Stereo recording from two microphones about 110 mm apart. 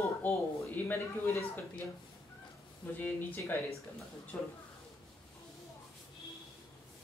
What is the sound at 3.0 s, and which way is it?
Speech, 15° left (ahead or behind).